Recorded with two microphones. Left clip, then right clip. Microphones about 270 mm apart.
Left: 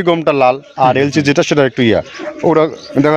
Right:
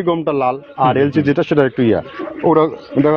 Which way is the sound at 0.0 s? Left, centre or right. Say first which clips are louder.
Left 5 dB; left.